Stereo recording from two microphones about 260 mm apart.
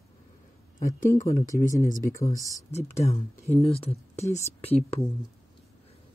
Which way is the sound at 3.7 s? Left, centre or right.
Left.